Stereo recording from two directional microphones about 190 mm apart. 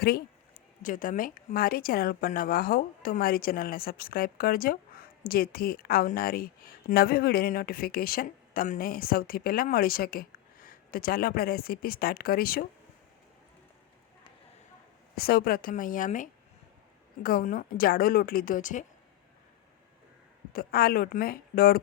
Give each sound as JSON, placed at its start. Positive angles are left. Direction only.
{"t": 0.0, "sound": "speech", "side_deg": 55}
{"t": 0.8, "sound": "a woman's voice", "side_deg": 45}
{"t": 15.1, "sound": "a woman's voice", "side_deg": 55}
{"t": 20.5, "sound": "a woman's voice", "side_deg": 50}